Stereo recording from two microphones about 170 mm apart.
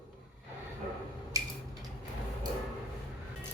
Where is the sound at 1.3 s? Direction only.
20° right (ahead or behind).